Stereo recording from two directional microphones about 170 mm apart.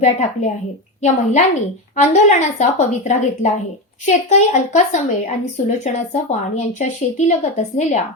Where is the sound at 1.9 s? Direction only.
45° left (ahead or behind).